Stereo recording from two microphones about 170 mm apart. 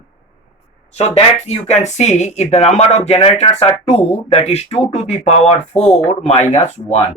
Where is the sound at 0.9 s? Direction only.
40° left (ahead or behind).